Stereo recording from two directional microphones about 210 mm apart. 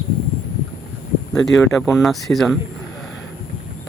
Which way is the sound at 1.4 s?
Centre (ahead or behind).